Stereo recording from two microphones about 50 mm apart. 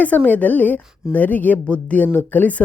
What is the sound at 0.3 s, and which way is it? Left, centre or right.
A woman's voice, left.